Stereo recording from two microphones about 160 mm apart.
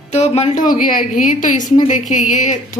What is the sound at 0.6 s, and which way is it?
A woman's voice, 60° left (ahead or behind).